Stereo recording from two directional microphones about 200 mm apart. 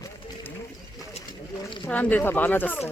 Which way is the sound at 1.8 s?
10° left (ahead or behind).